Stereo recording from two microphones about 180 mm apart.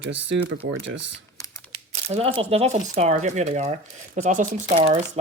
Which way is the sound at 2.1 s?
30° right (ahead or behind).